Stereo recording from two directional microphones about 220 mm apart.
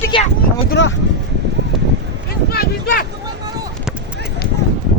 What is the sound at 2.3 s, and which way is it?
Speech, 45° left (ahead or behind).